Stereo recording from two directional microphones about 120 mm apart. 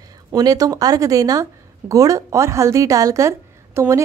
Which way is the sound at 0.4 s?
30° right (ahead or behind).